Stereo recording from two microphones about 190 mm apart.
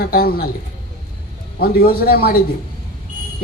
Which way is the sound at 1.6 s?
55° left (ahead or behind).